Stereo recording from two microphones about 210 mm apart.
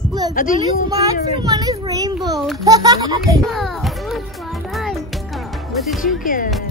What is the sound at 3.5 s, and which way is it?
Music, centre (ahead or behind).